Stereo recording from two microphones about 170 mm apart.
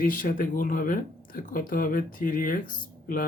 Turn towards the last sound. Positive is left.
turn(degrees=55)  # may be behind; listen again after turning